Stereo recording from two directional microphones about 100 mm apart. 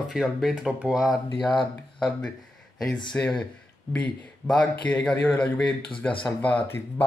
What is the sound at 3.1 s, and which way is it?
A man's voice, 10° left (ahead or behind).